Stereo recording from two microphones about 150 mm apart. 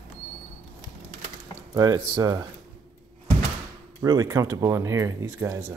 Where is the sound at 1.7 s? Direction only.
25° right (ahead or behind).